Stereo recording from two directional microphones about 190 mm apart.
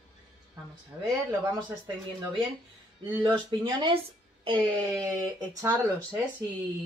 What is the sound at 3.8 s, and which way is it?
Speech, 25° right (ahead or behind).